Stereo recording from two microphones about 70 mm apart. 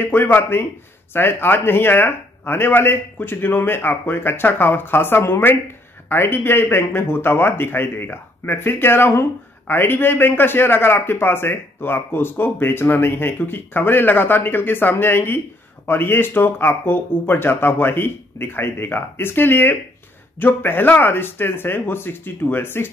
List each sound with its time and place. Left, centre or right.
0.0 s speech: left